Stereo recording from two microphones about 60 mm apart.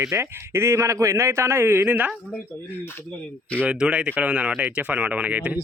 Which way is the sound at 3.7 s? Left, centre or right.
Centre.